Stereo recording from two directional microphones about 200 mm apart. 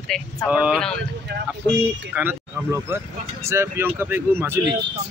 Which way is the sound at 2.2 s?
10° right (ahead or behind).